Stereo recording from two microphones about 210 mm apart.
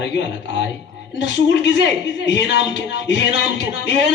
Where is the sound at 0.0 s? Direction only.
55° left (ahead or behind).